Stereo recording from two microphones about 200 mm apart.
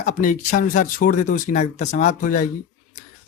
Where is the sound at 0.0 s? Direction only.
40° left (ahead or behind).